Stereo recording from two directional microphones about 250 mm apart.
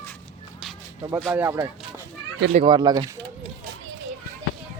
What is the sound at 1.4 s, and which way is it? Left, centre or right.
Speech, centre.